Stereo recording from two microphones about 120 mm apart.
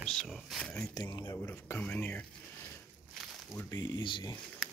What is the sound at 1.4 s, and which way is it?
Speech, 15° left (ahead or behind).